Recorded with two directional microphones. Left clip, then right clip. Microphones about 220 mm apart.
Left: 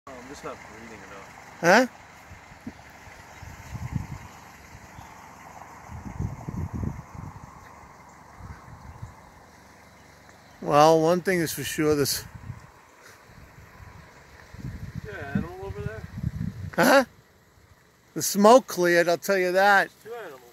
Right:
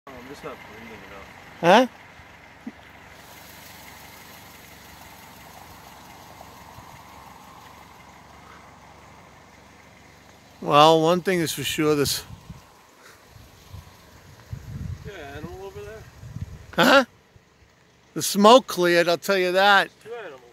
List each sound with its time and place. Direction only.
0.0 s vehicle: 25° right (ahead or behind)
1.6 s speech: 10° right (ahead or behind)
10.6 s speech: centre (ahead or behind)
15.0 s a sound: 15° left (ahead or behind)
16.7 s speech: centre (ahead or behind)
18.1 s speech: centre (ahead or behind)
20.1 s a sound: 45° left (ahead or behind)